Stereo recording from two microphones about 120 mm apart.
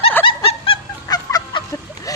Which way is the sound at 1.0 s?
35° left (ahead or behind).